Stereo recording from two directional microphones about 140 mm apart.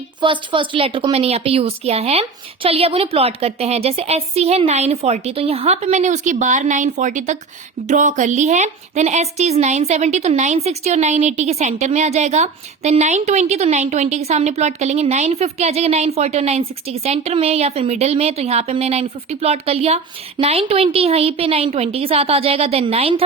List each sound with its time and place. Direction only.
0.2 s a woman's voice: 35° right (ahead or behind)